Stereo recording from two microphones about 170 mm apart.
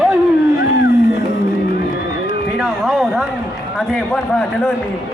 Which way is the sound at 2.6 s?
Centre (ahead or behind).